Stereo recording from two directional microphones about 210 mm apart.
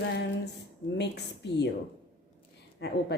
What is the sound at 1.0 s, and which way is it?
Speech, 55° left (ahead or behind).